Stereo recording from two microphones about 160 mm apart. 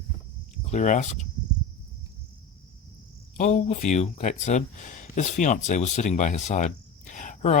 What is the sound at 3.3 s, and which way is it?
Speech, 50° left (ahead or behind).